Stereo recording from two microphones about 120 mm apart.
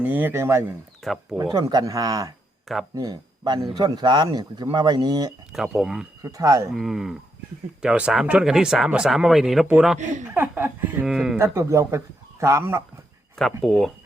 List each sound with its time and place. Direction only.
0.0 s speech: 15° right (ahead or behind)
1.0 s speech: centre (ahead or behind)
1.5 s a man's voice: 30° right (ahead or behind)
5.5 s speech: 5° right (ahead or behind)
6.2 s speech: 30° right (ahead or behind)
6.7 s speech: 5° right (ahead or behind)
9.6 s speech: 10° right (ahead or behind)
11.0 s speech: 5° right (ahead or behind)
11.3 s speech: 20° right (ahead or behind)
13.4 s speech: 5° left (ahead or behind)